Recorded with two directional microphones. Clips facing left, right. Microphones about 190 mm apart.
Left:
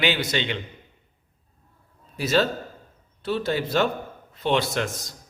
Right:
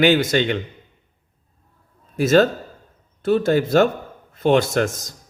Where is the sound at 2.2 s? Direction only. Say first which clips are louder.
Right 7 dB; 50° right (ahead or behind).